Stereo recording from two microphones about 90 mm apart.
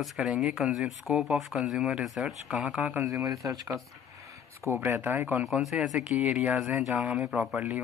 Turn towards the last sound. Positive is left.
turn(degrees=-10)  # may be behind; listen again after turning